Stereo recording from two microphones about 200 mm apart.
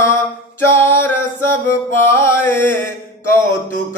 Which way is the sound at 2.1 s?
10° left (ahead or behind).